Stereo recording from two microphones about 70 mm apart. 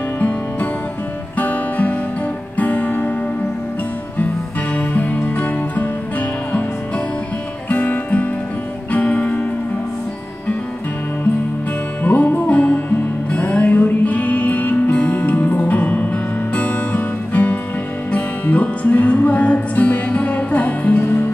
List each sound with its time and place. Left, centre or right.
1.4 s music: left
4.7 s music: left
7.7 s music: left
12.0 s music: left